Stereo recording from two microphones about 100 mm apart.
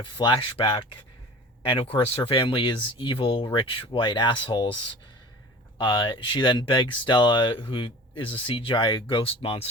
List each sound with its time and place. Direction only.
0.0 s speech: 50° left (ahead or behind)
5.7 s speech: 50° left (ahead or behind); by 9.6 s 70° left (ahead or behind)